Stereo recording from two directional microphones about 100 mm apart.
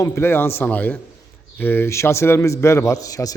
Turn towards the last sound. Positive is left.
turn(degrees=35)  # may be behind; listen again after turning